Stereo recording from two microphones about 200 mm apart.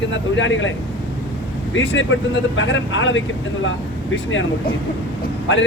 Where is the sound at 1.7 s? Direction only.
70° left (ahead or behind).